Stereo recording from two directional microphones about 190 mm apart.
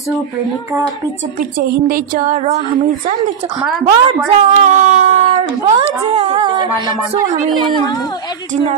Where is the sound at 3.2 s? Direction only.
20° right (ahead or behind).